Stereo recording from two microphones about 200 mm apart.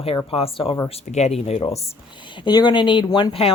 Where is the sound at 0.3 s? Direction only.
30° left (ahead or behind).